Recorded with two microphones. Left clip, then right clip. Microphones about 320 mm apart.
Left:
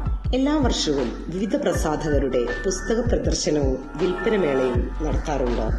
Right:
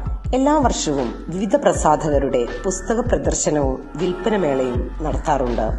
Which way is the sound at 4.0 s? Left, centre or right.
Centre.